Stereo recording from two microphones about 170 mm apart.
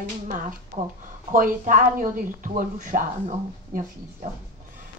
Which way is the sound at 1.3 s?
50° right (ahead or behind).